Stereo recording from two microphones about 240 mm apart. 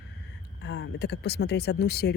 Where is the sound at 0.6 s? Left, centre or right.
Left.